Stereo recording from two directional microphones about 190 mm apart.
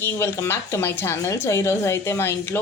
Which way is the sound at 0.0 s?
10° left (ahead or behind).